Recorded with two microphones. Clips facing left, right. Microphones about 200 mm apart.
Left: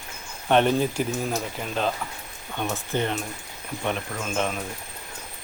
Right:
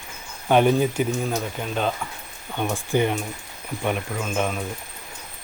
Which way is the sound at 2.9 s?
10° right (ahead or behind).